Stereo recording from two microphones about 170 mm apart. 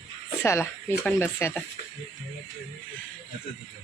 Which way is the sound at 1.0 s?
15° left (ahead or behind).